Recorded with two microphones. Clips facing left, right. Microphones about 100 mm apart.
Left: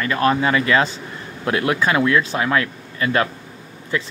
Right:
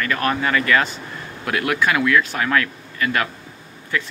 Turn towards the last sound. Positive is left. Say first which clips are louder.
# left 1 dB
turn(degrees=25)  # may be behind; listen again after turning